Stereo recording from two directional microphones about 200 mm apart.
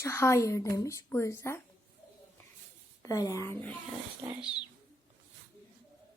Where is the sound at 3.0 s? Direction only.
15° left (ahead or behind).